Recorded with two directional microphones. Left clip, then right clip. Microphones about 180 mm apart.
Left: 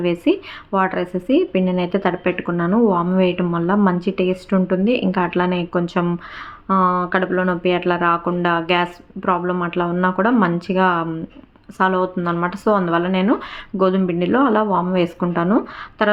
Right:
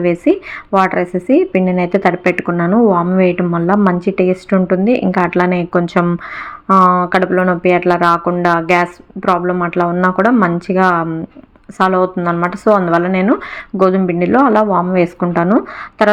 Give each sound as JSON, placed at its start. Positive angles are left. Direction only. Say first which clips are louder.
{"t": 0.0, "sound": "a woman's voice", "louder": "right 5 dB", "side_deg": -20}